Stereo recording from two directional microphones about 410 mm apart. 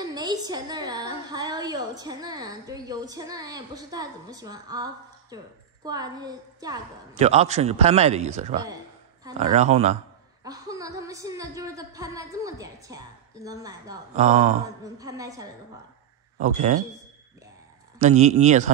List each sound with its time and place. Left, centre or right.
0.0 s a woman's voice: centre
18.0 s a woman's voice: centre